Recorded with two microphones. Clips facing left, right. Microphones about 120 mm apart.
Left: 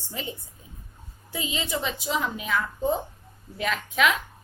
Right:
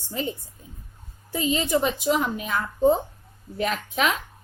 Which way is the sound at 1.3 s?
45° right (ahead or behind).